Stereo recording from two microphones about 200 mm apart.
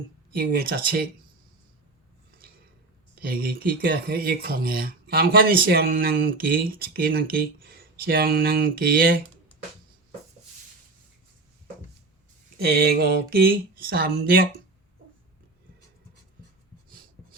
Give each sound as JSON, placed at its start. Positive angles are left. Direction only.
{"t": 0.3, "sound": "speech", "side_deg": -45}
{"t": 3.2, "sound": "speech", "side_deg": -50}
{"t": 12.5, "sound": "speech", "side_deg": -55}